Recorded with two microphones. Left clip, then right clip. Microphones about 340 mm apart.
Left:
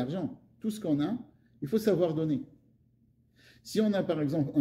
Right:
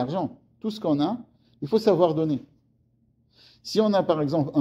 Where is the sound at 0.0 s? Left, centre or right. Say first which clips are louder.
Right 8 dB; centre.